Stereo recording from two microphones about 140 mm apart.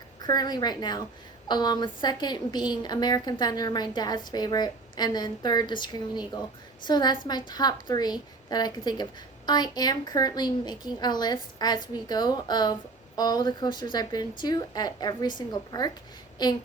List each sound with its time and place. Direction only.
0.3 s a woman's voice: 30° left (ahead or behind)